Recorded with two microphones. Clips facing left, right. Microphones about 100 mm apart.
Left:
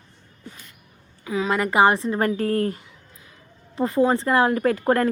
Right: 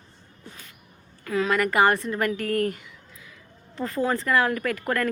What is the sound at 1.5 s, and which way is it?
Speech, 20° left (ahead or behind).